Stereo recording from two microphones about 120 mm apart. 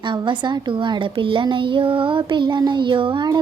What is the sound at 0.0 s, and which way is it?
Speech, 40° right (ahead or behind).